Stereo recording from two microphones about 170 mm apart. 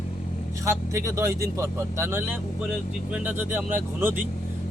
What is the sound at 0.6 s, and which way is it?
Speech, 20° right (ahead or behind).